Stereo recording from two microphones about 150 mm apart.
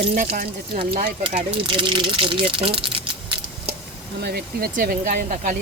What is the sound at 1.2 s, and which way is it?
Speech, 35° right (ahead or behind).